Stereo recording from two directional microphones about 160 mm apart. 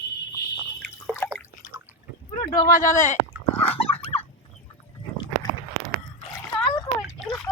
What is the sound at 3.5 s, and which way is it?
Dog, 35° left (ahead or behind).